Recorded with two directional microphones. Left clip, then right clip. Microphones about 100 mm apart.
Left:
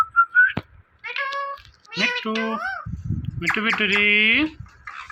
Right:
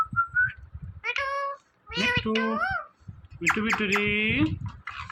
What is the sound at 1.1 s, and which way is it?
Cat, 25° right (ahead or behind).